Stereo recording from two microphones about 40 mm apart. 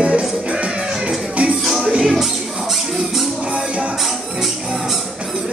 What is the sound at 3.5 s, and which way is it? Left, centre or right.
Music, right.